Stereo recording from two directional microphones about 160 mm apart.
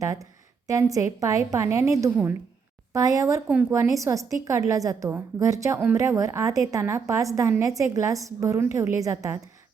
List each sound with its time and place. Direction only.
0.0 s a woman's voice: 20° right (ahead or behind)